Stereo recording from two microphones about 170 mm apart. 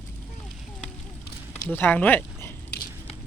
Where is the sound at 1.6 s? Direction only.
10° left (ahead or behind).